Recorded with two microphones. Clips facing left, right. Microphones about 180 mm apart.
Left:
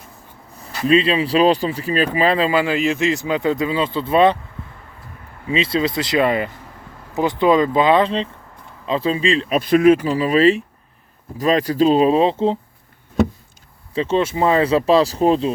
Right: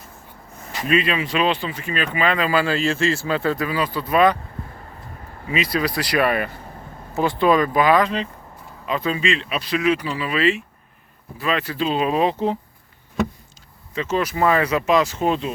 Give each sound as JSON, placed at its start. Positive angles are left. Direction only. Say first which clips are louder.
{"t": 0.6, "sound": "speech", "louder": "left 5 dB", "side_deg": 30}
{"t": 2.5, "sound": "speech", "louder": "left 2 dB", "side_deg": 20}
{"t": 5.5, "sound": "speech", "louder": "left 3 dB", "side_deg": 25}
{"t": 13.9, "sound": "speech", "louder": "left 4 dB", "side_deg": 30}